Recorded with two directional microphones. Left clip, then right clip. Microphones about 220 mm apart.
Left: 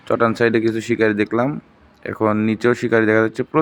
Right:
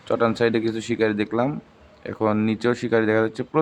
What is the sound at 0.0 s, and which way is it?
Speech, 15° left (ahead or behind).